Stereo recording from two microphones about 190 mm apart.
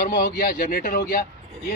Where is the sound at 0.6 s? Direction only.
45° left (ahead or behind).